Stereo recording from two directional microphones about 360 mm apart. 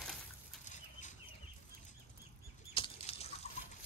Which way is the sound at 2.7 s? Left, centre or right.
Centre.